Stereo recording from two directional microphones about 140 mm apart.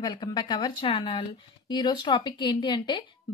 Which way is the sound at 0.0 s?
30° left (ahead or behind).